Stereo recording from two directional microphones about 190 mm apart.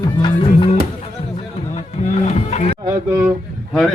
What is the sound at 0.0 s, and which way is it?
Music, 20° left (ahead or behind).